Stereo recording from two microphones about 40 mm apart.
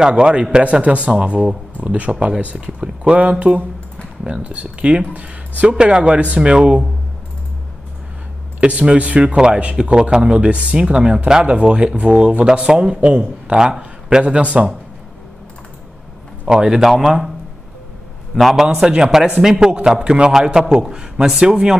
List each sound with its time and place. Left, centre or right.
0.1 s speech: right
8.5 s speech: right
14.3 s speech: right
16.4 s a man's voice: centre
16.8 s a man's voice: centre
18.3 s a man's voice: centre